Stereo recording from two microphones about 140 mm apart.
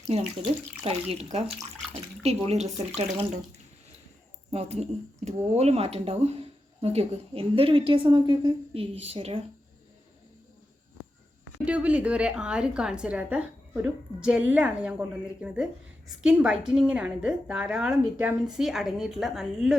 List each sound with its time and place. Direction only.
0.9 s a woman's voice: 50° right (ahead or behind)
4.5 s a woman's voice: 50° right (ahead or behind)
11.6 s a woman's voice: 10° right (ahead or behind)